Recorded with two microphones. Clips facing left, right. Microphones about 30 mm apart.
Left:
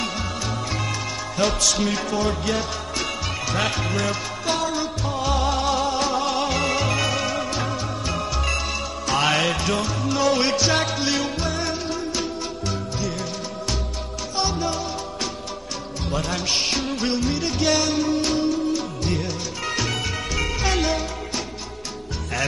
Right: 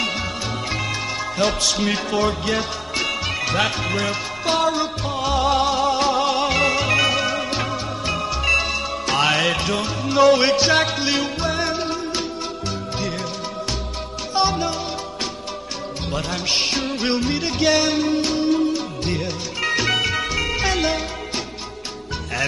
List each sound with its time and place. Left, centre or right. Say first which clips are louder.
1.4 s music: even; centre
1.9 s music: right 2 dB; right
2.2 s music: right 2 dB; centre
5.2 s music: right 4 dB; centre
8.5 s music: right 5 dB; right
9.2 s music: right 2 dB; centre
10.0 s music: right 7 dB; right
10.7 s music: right 3 dB; centre
14.3 s music: right 5 dB; right
16.1 s music: right 1 dB; centre
16.8 s music: right 2 dB; right; by 20.9 s centre